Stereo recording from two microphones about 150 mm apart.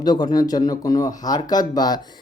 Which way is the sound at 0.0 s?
30° left (ahead or behind).